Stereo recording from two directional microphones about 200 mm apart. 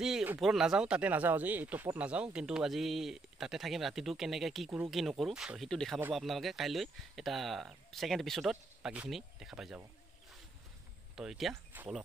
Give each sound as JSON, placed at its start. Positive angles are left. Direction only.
{"t": 0.0, "sound": "speech", "side_deg": -5}
{"t": 11.1, "sound": "speech", "side_deg": 0}